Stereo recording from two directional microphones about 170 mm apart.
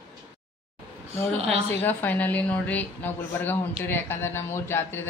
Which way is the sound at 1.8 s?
10° left (ahead or behind).